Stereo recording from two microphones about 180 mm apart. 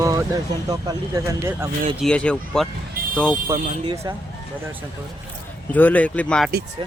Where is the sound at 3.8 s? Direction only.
15° right (ahead or behind).